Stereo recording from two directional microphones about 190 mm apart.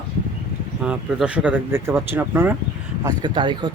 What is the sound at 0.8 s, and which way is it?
Speech, 5° right (ahead or behind).